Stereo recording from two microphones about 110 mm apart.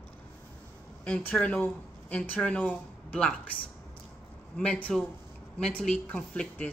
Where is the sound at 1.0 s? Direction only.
15° left (ahead or behind).